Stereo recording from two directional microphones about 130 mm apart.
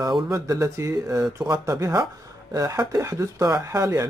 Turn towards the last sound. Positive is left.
turn(degrees=-20)  # may be behind; listen again after turning